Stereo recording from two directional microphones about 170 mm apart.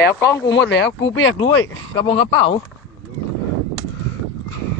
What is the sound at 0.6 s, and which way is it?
Speech, 90° left.